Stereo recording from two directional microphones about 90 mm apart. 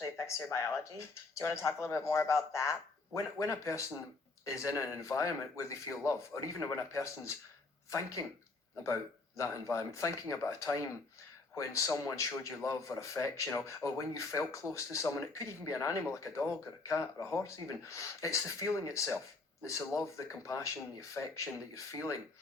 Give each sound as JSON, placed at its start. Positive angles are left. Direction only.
{"t": 0.2, "sound": "a man's voice", "side_deg": 35}
{"t": 9.4, "sound": "a man's voice", "side_deg": 35}